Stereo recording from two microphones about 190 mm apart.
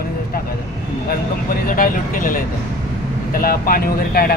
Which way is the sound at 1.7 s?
45° left (ahead or behind).